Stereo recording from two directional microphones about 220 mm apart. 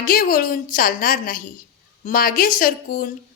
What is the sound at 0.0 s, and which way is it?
A woman's voice, 40° left (ahead or behind).